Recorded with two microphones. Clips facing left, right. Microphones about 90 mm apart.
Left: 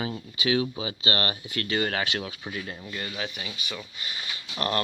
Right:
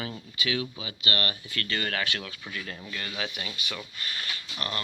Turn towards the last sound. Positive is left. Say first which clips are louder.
# left 7 dB
turn(degrees=40)  # may be behind; listen again after turning